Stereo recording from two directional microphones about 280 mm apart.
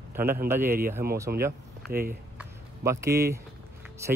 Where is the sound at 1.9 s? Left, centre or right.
Right.